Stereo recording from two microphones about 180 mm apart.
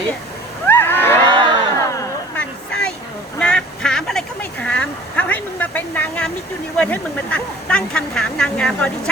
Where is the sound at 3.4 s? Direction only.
5° left (ahead or behind).